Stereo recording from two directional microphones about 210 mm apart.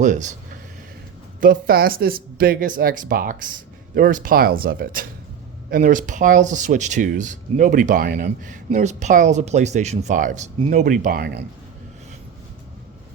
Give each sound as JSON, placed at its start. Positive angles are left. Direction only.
{"t": 0.0, "sound": "speech", "side_deg": -35}
{"t": 1.4, "sound": "speech", "side_deg": -45}